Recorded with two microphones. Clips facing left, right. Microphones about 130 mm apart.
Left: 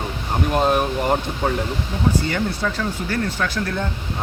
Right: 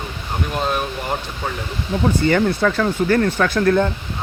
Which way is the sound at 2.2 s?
60° right (ahead or behind).